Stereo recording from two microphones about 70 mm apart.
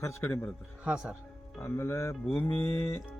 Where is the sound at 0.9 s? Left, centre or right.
Centre.